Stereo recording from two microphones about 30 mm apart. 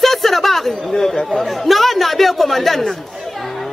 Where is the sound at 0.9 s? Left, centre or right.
Centre.